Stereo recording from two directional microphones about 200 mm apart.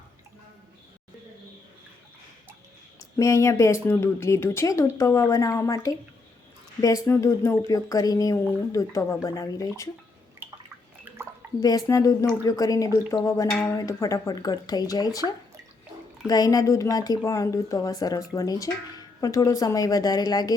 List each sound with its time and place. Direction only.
3.0 s speech: 15° left (ahead or behind)
11.6 s speech: 15° left (ahead or behind)